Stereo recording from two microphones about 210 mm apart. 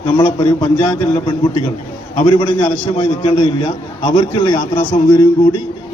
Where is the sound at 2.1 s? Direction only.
25° left (ahead or behind).